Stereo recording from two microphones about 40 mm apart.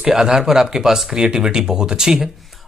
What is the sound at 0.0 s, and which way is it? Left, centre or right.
Speech, centre.